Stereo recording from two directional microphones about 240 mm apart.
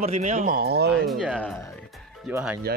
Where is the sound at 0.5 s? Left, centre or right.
Right.